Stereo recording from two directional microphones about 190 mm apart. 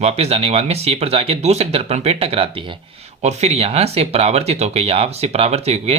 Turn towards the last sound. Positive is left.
turn(degrees=-35)  # may be behind; listen again after turning